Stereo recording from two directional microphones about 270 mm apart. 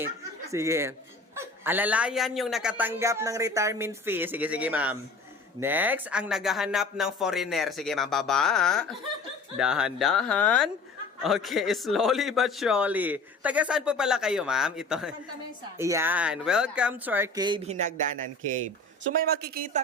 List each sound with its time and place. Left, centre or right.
0.5 s a man's voice: centre
19.0 s speech: right